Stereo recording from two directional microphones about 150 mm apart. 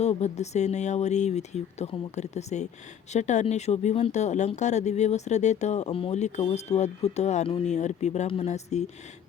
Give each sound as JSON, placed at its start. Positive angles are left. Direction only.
{"t": 0.0, "sound": "speech", "side_deg": 50}